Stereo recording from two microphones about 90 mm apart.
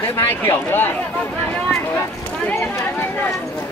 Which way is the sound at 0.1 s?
25° left (ahead or behind).